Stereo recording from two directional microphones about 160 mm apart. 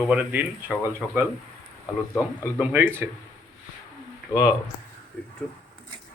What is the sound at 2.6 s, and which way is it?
Speech, 10° right (ahead or behind).